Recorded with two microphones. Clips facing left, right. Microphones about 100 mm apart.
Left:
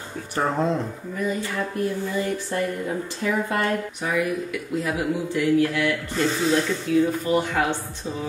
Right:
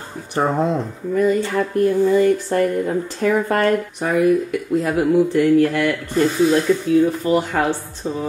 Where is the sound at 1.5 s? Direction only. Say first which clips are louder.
Right 8 dB; 55° right (ahead or behind).